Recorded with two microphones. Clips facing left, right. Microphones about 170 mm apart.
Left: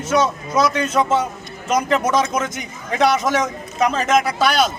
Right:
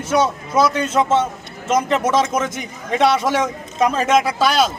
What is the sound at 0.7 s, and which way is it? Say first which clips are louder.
Speech: right 1 dB; 25° right (ahead or behind).